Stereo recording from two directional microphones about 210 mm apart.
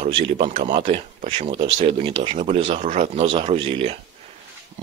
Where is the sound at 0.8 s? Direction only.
35° right (ahead or behind).